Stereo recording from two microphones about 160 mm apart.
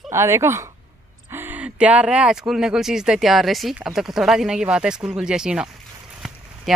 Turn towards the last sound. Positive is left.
turn(degrees=0)  # may be behind; listen again after turning